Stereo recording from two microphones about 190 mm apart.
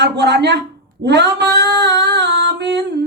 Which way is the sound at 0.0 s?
65° right (ahead or behind).